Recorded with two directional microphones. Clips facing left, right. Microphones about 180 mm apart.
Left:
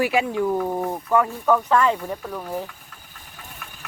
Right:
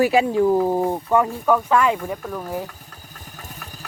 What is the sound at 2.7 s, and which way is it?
Engine, 40° right (ahead or behind).